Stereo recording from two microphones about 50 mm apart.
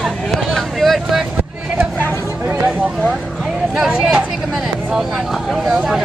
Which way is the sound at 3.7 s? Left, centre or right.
Centre.